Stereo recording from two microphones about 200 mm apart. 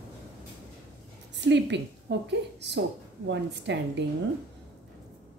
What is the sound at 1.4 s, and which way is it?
Speech, 60° right (ahead or behind).